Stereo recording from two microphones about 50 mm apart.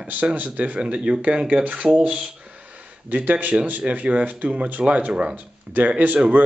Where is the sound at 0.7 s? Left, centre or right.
Right.